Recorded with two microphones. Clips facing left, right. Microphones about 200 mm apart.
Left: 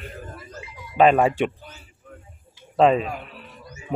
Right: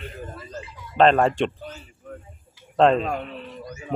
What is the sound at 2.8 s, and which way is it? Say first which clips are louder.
Speech: even; 5° left (ahead or behind).